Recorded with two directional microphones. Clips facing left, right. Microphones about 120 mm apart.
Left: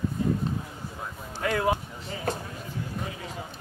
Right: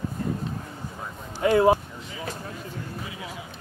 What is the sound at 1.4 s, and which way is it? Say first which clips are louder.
Speech: right 7 dB; 25° right (ahead or behind).